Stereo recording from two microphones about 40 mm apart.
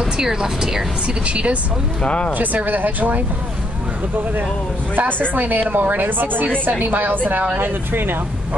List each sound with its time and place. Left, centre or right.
0.0 s speech: centre
1.0 s speech: right
2.0 s speech: left
2.3 s a woman's voice: right
5.3 s a woman's voice: right